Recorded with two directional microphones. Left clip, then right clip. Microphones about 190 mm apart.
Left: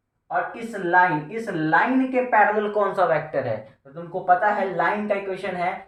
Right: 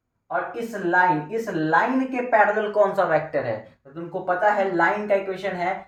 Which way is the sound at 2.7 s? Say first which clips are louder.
Right 1 dB; 15° left (ahead or behind).